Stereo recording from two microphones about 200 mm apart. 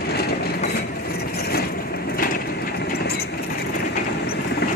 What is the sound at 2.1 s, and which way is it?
Wood, 45° left (ahead or behind).